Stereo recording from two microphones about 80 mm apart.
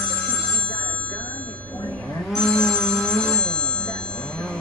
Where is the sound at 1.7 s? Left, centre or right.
Centre.